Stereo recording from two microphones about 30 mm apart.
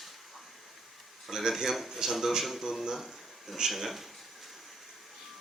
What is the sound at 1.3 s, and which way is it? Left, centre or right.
Speech, centre.